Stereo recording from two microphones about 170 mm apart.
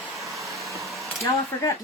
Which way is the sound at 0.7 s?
20° right (ahead or behind).